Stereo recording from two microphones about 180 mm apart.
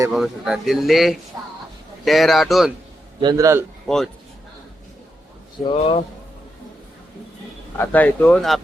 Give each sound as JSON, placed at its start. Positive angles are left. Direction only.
{"t": 0.1, "sound": "speech", "side_deg": 0}
{"t": 3.2, "sound": "a man's voice", "side_deg": -20}
{"t": 3.8, "sound": "speech", "side_deg": 0}
{"t": 5.7, "sound": "speech", "side_deg": 35}
{"t": 7.8, "sound": "speech", "side_deg": 10}